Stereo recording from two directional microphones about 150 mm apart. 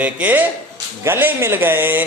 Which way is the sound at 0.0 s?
10° right (ahead or behind).